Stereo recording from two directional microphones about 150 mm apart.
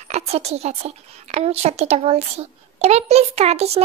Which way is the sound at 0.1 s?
45° right (ahead or behind).